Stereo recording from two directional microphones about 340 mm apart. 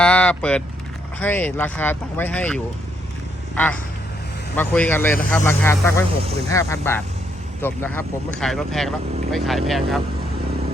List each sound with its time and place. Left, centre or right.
0.0 s vehicle: centre
1.2 s speech: centre